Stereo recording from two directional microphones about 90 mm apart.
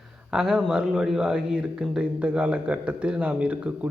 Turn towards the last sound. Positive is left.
turn(degrees=-15)  # may be behind; listen again after turning